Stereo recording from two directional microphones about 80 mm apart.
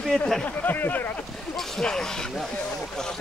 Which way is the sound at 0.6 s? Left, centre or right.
Left.